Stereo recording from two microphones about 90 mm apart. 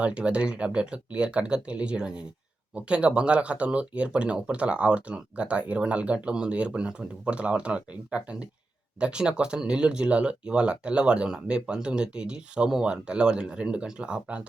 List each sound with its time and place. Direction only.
0.0 s speech: 10° right (ahead or behind)